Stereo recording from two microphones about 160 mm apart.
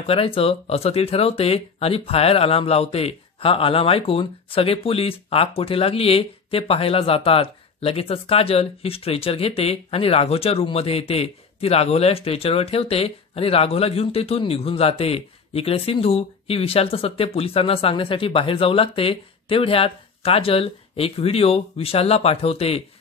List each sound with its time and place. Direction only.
0.0 s speech: 35° left (ahead or behind)